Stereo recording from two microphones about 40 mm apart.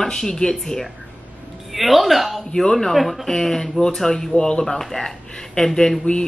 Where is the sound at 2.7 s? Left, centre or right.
Centre.